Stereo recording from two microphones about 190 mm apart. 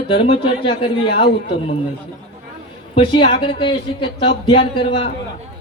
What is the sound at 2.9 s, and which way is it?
Speech, 30° left (ahead or behind).